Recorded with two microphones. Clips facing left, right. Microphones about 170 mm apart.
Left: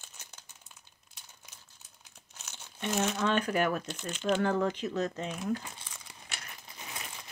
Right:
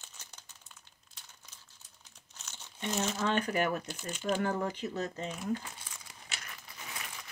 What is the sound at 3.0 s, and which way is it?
Speech, 60° left (ahead or behind).